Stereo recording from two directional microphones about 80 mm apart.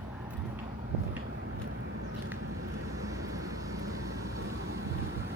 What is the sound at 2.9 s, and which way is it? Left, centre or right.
Vehicle, right.